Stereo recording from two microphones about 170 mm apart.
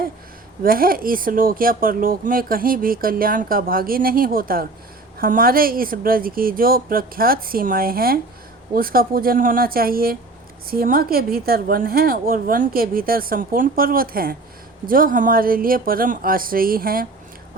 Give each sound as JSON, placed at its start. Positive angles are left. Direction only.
{"t": 0.6, "sound": "speech", "side_deg": -60}